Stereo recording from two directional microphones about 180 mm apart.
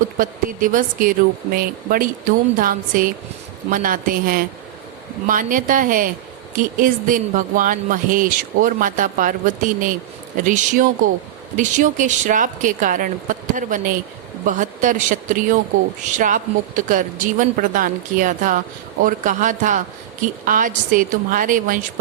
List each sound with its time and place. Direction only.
0.2 s speech: 50° right (ahead or behind)